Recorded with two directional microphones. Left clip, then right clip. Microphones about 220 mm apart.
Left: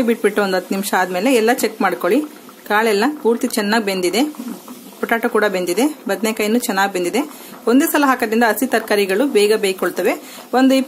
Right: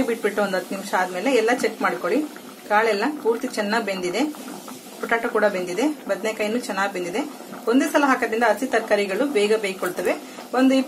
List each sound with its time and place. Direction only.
0.2 s speech: 50° left (ahead or behind)